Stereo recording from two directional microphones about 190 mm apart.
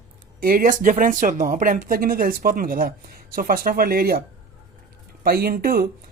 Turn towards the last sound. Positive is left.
turn(degrees=-50)  # may be behind; listen again after turning